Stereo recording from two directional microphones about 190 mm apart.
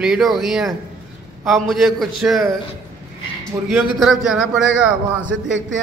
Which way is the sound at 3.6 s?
Centre (ahead or behind).